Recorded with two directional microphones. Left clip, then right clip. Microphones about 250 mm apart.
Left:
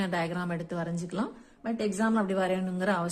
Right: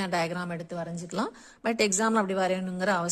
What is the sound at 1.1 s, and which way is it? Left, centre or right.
A woman's voice, right.